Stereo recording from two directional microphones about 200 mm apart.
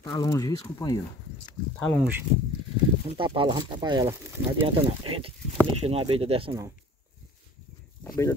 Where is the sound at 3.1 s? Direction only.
25° right (ahead or behind).